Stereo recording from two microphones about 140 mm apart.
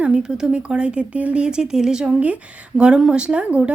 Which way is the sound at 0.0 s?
5° right (ahead or behind).